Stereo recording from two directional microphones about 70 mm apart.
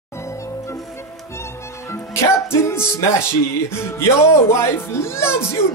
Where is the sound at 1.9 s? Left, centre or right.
Left.